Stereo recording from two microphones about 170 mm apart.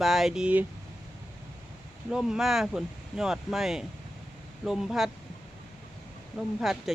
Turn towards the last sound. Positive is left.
turn(degrees=0)  # may be behind; listen again after turning